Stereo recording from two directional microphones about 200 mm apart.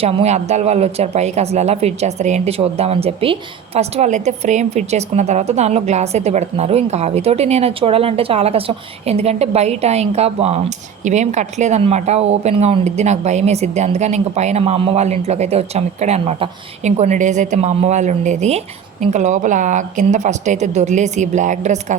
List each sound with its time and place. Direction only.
0.0 s speech: 30° right (ahead or behind)